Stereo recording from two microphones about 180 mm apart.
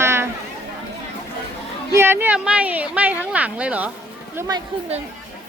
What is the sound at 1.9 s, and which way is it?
Speech, 15° right (ahead or behind).